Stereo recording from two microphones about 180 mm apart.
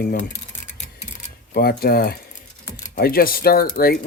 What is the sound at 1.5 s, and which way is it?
Speech, 60° left (ahead or behind).